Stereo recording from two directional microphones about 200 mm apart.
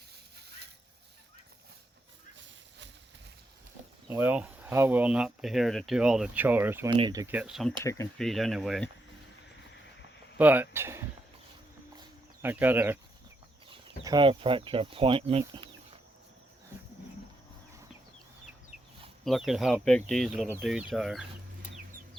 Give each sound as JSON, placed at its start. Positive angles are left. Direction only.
{"t": 4.1, "sound": "speech", "side_deg": -10}
{"t": 6.9, "sound": "speech", "side_deg": -20}
{"t": 10.3, "sound": "speech", "side_deg": -10}
{"t": 11.9, "sound": "a sound", "side_deg": -10}
{"t": 13.7, "sound": "speech", "side_deg": -20}
{"t": 19.2, "sound": "speech", "side_deg": 0}